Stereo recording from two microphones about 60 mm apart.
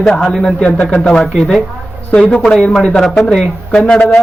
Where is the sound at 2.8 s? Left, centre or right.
Centre.